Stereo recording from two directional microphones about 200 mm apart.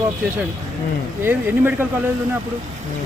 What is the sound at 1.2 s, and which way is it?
Speech, 10° right (ahead or behind).